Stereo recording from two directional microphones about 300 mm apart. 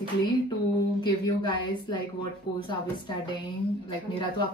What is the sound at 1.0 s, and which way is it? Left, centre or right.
Speech, centre.